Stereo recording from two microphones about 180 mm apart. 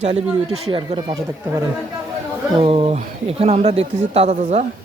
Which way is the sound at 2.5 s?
30° right (ahead or behind).